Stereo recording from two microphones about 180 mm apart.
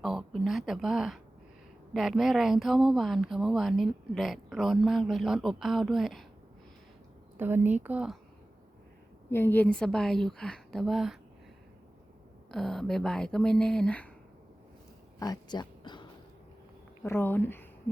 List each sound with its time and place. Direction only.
0.0 s speech: centre (ahead or behind)
7.3 s speech: 10° right (ahead or behind)
9.3 s speech: 10° left (ahead or behind)
12.5 s speech: 5° left (ahead or behind)
15.2 s speech: 20° left (ahead or behind)
17.0 s speech: 10° left (ahead or behind)